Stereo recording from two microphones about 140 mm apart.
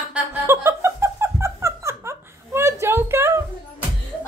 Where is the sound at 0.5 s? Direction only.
20° right (ahead or behind).